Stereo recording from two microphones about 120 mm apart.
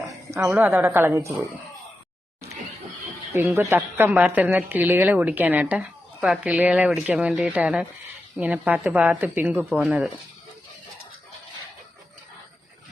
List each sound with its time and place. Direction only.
0.3 s a woman's voice: 15° right (ahead or behind)
3.3 s a woman's voice: 20° right (ahead or behind)